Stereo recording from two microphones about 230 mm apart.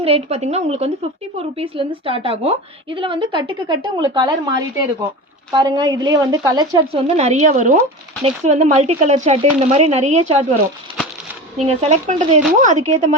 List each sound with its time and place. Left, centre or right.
0.0 s a woman's voice: right
7.2 s a woman's voice: right
11.5 s a woman's voice: right